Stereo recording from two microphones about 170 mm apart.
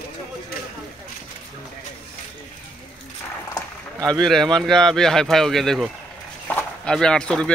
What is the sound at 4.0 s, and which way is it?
Speech, 25° right (ahead or behind).